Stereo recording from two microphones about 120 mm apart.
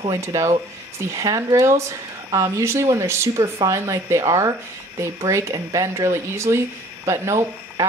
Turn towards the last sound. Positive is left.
turn(degrees=-25)  # may be behind; listen again after turning